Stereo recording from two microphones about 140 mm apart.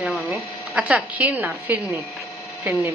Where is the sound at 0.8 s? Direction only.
10° right (ahead or behind).